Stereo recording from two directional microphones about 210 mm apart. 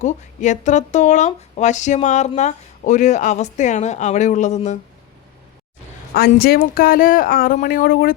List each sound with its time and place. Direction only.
0.0 s speech: 35° left (ahead or behind)
6.1 s speech: 45° left (ahead or behind)